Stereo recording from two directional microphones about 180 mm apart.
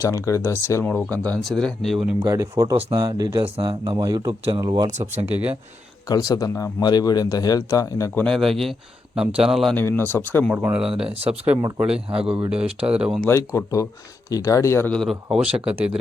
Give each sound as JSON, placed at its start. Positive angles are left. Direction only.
{"t": 0.0, "sound": "speech", "side_deg": 15}
{"t": 2.1, "sound": "speech", "side_deg": -15}
{"t": 5.1, "sound": "speech", "side_deg": -10}
{"t": 6.1, "sound": "a man's voice", "side_deg": 20}
{"t": 8.2, "sound": "speech", "side_deg": 0}
{"t": 9.7, "sound": "speech", "side_deg": 10}
{"t": 10.5, "sound": "speech", "side_deg": -5}
{"t": 12.0, "sound": "speech", "side_deg": -30}
{"t": 12.5, "sound": "speech", "side_deg": -5}
{"t": 13.2, "sound": "speech", "side_deg": 15}